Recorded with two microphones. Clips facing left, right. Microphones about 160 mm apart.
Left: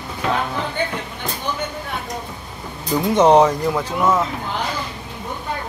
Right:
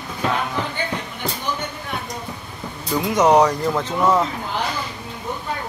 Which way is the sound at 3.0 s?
30° left (ahead or behind).